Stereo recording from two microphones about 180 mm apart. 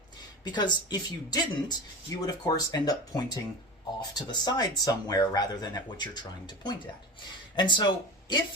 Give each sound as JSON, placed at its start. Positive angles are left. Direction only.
{"t": 0.4, "sound": "speech", "side_deg": 25}